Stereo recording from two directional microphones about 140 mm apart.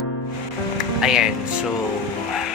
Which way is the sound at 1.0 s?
5° right (ahead or behind).